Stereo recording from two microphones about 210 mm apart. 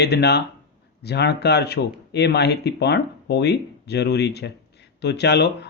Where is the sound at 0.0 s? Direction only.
50° left (ahead or behind).